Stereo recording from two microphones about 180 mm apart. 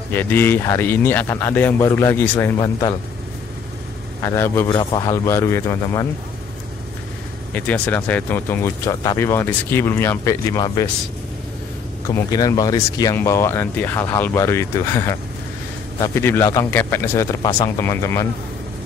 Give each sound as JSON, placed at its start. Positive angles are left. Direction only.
{"t": 0.1, "sound": "speech", "side_deg": 10}
{"t": 4.2, "sound": "a man's voice", "side_deg": 15}
{"t": 7.5, "sound": "speech", "side_deg": 10}
{"t": 12.3, "sound": "speech", "side_deg": 20}